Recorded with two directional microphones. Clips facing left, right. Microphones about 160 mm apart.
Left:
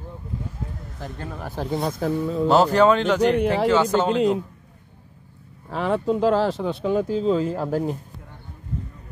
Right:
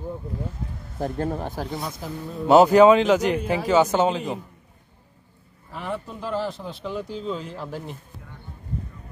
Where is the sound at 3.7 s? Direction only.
10° right (ahead or behind).